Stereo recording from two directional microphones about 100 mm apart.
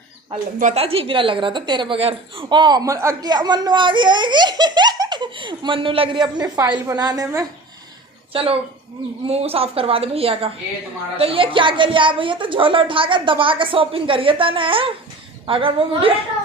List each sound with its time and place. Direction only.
0.3 s a woman's voice: 80° right; by 2.0 s 50° right (ahead or behind)
2.0 s a woman's voice: 70° right (ahead or behind); by 2.8 s 50° right (ahead or behind)
2.8 s a woman's voice: 30° right (ahead or behind)
3.2 s a woman's voice: 45° right (ahead or behind)
8.3 s a woman's voice: 65° right (ahead or behind)
9.2 s a woman's voice: 80° right; by 16.1 s 65° right (ahead or behind)